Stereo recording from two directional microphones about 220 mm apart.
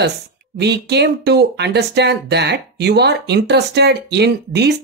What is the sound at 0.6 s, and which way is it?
Speech, 50° right (ahead or behind).